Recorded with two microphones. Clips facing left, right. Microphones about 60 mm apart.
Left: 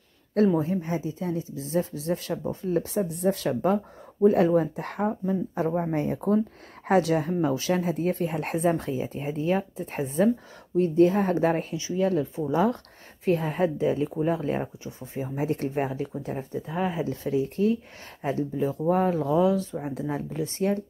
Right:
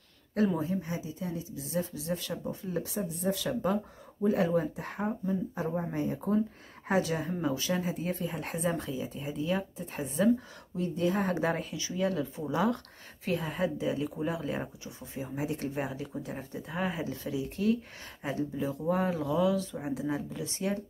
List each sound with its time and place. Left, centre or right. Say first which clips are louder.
0.6 s speech: left 6 dB; left
19.9 s speech: left 2 dB; left